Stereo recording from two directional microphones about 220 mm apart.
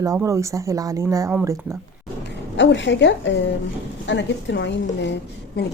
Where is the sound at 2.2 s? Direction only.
55° left (ahead or behind).